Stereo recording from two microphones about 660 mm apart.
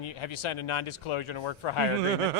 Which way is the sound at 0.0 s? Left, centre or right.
Left.